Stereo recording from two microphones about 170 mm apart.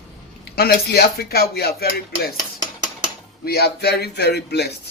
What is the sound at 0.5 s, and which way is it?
Speech, 70° left (ahead or behind).